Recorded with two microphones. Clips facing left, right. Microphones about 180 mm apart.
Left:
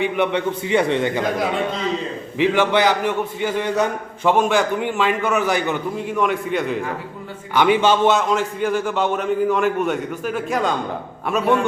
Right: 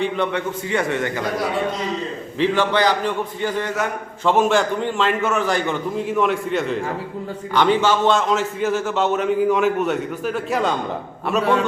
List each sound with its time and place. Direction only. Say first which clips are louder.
0.0 s a man's voice: left 2 dB; 15° left (ahead or behind)
2.4 s a man's voice: left 1 dB; 10° left (ahead or behind)
4.4 s a man's voice: right 3 dB; centre (ahead or behind)
8.1 s a man's voice: even; centre (ahead or behind)